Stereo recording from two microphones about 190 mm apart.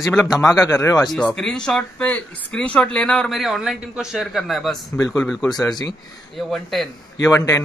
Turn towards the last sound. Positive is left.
turn(degrees=15)  # may be behind; listen again after turning